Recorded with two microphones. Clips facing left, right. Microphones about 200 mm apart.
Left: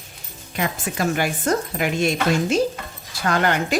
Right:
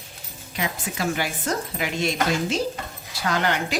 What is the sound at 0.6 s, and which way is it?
Speech, 50° left (ahead or behind).